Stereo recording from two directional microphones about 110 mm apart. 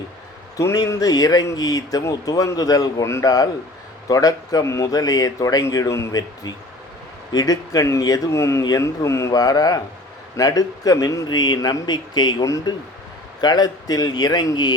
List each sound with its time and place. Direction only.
0.5 s speech: 30° left (ahead or behind)